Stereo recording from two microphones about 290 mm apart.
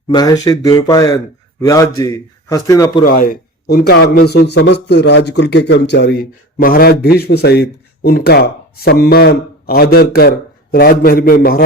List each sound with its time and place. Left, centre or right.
0.1 s a man's voice: centre
3.0 s speech: left